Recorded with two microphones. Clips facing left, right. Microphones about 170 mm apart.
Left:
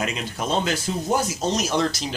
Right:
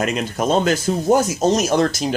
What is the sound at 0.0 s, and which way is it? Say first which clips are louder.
Speech: right 7 dB; 45° right (ahead or behind).